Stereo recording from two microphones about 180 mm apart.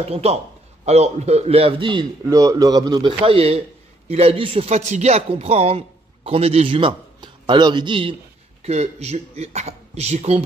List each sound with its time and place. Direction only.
0.0 s a man's voice: 35° right (ahead or behind)